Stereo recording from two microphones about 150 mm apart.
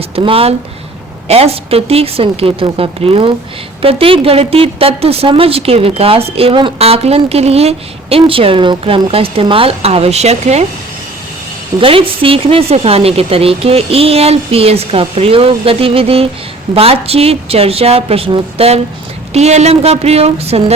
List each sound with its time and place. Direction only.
0.2 s a woman's voice: 40° right (ahead or behind)
11.8 s a woman's voice: 35° right (ahead or behind)